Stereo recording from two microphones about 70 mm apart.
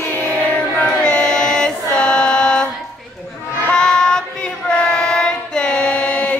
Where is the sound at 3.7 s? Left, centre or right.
Centre.